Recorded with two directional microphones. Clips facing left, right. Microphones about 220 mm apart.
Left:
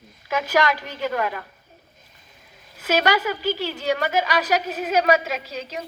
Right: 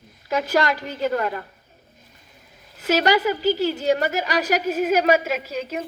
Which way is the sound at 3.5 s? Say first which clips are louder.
Right 4 dB; 40° right (ahead or behind).